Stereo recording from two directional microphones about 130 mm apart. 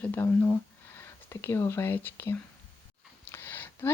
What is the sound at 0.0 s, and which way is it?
Speech, 15° left (ahead or behind).